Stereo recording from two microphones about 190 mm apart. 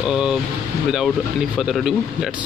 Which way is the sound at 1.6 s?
Centre (ahead or behind).